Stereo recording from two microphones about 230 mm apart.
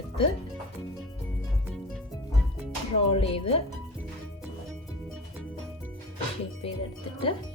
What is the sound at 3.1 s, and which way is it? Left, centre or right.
Speech, left.